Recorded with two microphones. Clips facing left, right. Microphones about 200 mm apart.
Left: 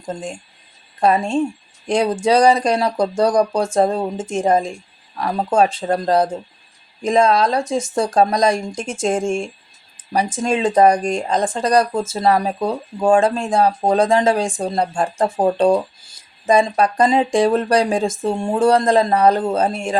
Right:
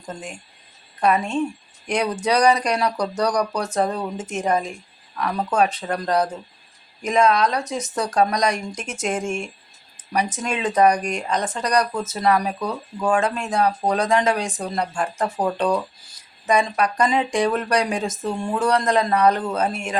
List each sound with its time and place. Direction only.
0.0 s speech: 30° left (ahead or behind)